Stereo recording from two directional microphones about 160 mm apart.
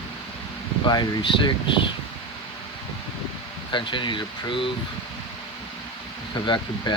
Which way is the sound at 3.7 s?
30° left (ahead or behind).